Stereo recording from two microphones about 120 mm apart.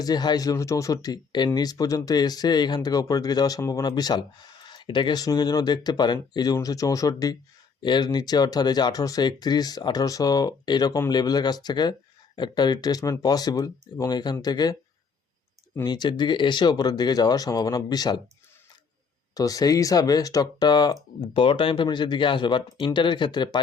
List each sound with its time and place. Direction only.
0.0 s speech: 35° left (ahead or behind)
15.9 s speech: 40° left (ahead or behind)
19.3 s speech: 30° left (ahead or behind)